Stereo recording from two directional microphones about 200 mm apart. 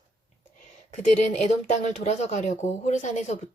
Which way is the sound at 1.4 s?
35° left (ahead or behind).